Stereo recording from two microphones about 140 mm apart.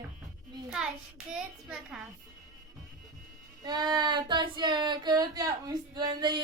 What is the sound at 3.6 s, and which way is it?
Child singing, 30° right (ahead or behind).